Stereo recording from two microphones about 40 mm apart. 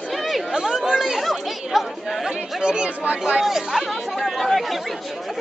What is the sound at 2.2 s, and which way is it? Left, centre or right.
Speech, right.